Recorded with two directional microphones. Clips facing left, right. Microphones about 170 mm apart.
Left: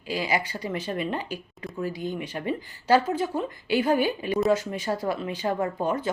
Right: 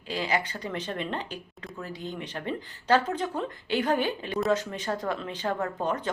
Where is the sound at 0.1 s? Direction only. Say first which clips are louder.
Left 2 dB; 10° left (ahead or behind).